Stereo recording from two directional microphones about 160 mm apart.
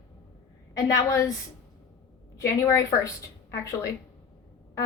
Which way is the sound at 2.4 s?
20° left (ahead or behind).